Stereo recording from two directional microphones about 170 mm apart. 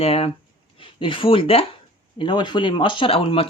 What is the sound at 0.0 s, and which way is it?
Speech, 35° left (ahead or behind).